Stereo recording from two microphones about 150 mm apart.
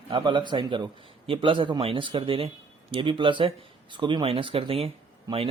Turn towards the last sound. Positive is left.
turn(degrees=-25)  # may be behind; listen again after turning